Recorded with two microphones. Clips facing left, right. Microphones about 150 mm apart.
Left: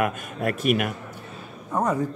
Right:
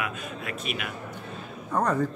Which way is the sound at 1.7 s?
10° left (ahead or behind).